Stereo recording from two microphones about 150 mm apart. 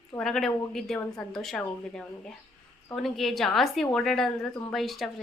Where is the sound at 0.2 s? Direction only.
5° left (ahead or behind).